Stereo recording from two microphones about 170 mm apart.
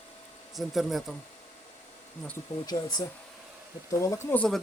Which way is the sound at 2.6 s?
25° left (ahead or behind).